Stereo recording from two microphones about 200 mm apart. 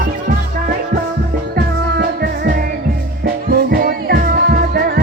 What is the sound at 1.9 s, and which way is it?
Music, 50° right (ahead or behind).